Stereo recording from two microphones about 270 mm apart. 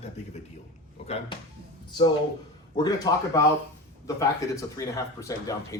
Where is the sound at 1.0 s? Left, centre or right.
Left.